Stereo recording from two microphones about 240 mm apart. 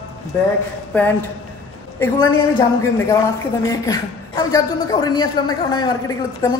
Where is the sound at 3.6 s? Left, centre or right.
Centre.